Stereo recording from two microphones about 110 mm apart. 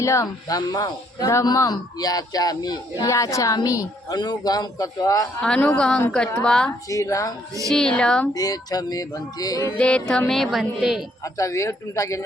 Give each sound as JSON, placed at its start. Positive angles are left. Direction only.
{"t": 0.0, "sound": "speech", "side_deg": 30}
{"t": 5.4, "sound": "speech", "side_deg": 10}
{"t": 6.8, "sound": "speech", "side_deg": 30}
{"t": 7.7, "sound": "speech", "side_deg": 5}
{"t": 8.3, "sound": "speech", "side_deg": 35}
{"t": 9.7, "sound": "music", "side_deg": 10}
{"t": 11.2, "sound": "speech", "side_deg": 30}